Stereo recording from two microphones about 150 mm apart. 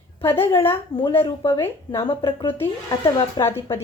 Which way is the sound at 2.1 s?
30° left (ahead or behind).